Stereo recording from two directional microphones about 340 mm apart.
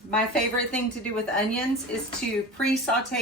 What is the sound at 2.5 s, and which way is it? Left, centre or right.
Speech, centre.